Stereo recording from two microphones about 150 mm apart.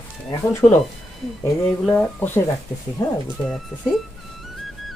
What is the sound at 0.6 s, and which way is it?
Speech, 20° left (ahead or behind).